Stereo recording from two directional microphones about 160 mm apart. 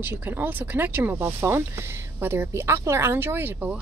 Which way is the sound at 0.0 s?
10° right (ahead or behind).